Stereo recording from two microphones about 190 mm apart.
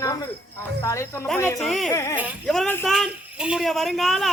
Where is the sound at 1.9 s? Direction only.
15° left (ahead or behind).